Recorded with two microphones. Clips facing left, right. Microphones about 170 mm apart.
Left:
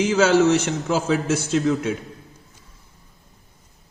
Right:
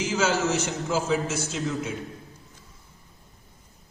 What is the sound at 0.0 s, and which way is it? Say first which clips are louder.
A man's voice: left 8 dB; 60° left (ahead or behind).